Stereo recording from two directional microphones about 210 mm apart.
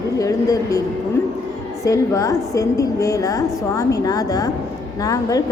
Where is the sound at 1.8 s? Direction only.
15° left (ahead or behind).